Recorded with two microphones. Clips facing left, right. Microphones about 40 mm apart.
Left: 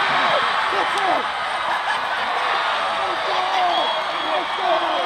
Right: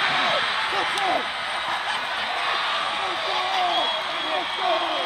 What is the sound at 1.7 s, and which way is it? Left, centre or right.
Snicker, centre.